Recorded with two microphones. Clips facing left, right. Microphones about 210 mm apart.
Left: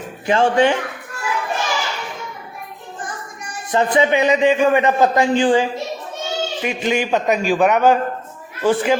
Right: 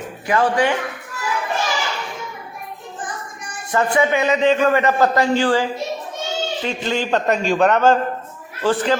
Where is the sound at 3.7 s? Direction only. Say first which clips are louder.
Left 2 dB; 20° left (ahead or behind).